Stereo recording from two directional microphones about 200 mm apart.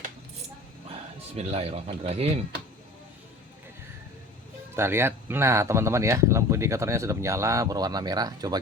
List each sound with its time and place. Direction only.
1.4 s speech: 30° right (ahead or behind)
4.7 s speech: 10° right (ahead or behind)